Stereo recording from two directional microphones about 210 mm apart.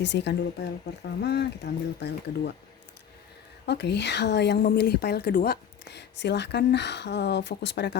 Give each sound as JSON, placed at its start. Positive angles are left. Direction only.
{"t": 0.0, "sound": "a woman's voice", "side_deg": 55}
{"t": 3.7, "sound": "a woman's voice", "side_deg": 55}